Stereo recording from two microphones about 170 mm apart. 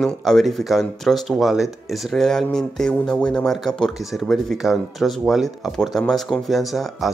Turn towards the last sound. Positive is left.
turn(degrees=0)  # may be behind; listen again after turning